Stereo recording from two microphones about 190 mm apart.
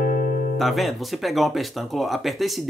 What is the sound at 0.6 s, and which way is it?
Speech, centre (ahead or behind).